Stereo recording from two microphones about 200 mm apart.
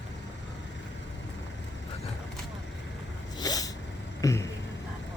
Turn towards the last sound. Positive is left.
turn(degrees=15)  # may be behind; listen again after turning